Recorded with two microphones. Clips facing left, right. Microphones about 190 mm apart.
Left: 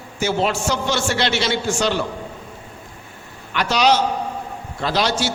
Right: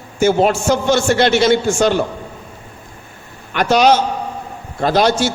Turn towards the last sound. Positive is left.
turn(degrees=-50)  # may be behind; listen again after turning